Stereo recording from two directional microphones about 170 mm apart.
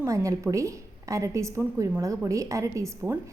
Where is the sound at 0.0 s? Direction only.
20° right (ahead or behind).